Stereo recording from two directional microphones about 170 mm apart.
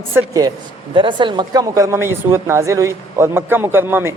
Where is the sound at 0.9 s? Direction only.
30° right (ahead or behind).